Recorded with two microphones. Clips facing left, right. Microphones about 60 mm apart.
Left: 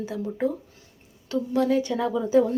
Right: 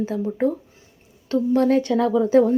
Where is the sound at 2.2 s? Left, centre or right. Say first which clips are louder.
Right 4 dB; right.